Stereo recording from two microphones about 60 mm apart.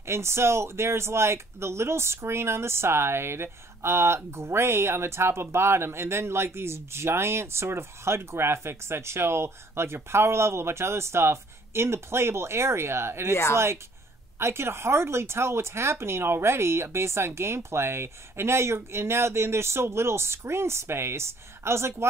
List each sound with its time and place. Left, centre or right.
0.0 s speech: right
13.3 s speech: left
14.4 s speech: right